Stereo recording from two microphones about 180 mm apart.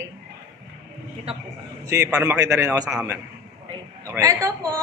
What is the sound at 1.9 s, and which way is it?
A man's voice, 15° right (ahead or behind).